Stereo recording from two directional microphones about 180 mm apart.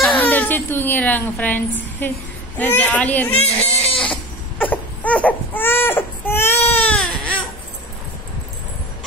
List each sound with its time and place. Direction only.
0.3 s a woman's voice: 10° left (ahead or behind)
3.8 s a sound: 30° left (ahead or behind)
4.1 s baby cry: 10° left (ahead or behind)